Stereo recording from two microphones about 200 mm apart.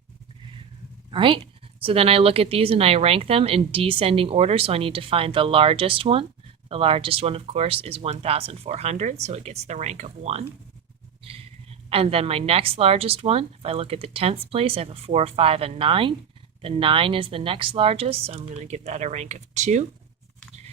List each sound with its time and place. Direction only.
1.1 s a woman's voice: 25° right (ahead or behind)